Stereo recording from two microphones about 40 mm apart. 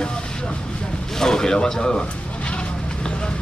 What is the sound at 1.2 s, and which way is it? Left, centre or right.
Speech, centre.